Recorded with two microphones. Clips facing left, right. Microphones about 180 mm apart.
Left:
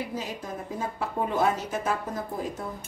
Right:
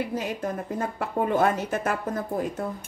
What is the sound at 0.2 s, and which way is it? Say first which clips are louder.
A woman's voice: right 5 dB; 60° right (ahead or behind).